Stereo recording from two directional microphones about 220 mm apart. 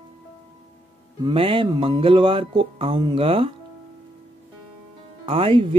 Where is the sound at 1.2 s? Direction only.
25° right (ahead or behind).